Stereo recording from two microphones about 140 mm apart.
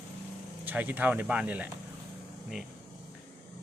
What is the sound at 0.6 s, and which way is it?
Speech, 15° right (ahead or behind).